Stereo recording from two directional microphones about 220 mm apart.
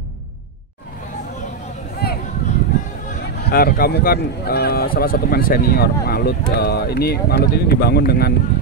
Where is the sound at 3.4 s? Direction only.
45° left (ahead or behind).